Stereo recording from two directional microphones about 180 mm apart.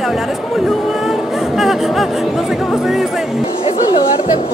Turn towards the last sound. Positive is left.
turn(degrees=30)  # may be behind; listen again after turning